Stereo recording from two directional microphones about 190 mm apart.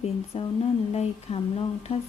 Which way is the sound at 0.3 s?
30° left (ahead or behind).